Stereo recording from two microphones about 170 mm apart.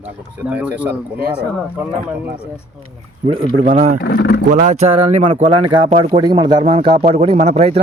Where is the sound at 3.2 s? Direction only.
30° right (ahead or behind).